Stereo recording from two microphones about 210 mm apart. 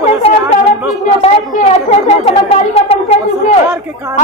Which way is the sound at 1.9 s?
30° left (ahead or behind).